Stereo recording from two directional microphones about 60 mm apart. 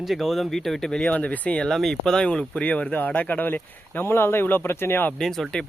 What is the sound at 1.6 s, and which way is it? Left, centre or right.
Speech, centre.